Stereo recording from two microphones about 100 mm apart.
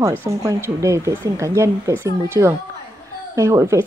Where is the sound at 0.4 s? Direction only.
35° right (ahead or behind).